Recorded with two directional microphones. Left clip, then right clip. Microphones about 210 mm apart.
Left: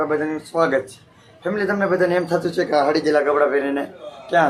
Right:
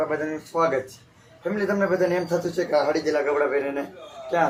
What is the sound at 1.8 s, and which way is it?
Speech, 10° left (ahead or behind).